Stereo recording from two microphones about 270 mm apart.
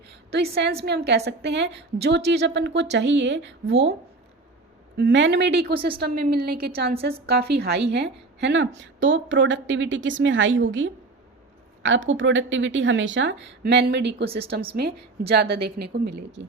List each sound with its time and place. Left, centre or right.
0.5 s a woman's voice: right
4.9 s a woman's voice: right
14.3 s speech: right
15.3 s a woman's voice: right